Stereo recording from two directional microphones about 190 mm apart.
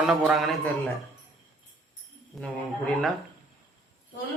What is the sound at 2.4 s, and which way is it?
Speech, centre (ahead or behind).